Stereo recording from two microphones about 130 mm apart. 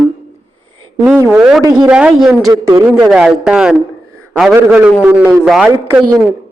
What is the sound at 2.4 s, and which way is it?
Speech, 25° right (ahead or behind).